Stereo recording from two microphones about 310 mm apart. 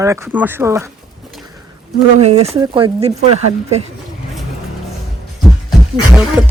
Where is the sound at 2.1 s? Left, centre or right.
Right.